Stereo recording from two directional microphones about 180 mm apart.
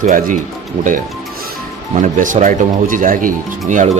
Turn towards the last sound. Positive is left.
turn(degrees=-45)  # may be behind; listen again after turning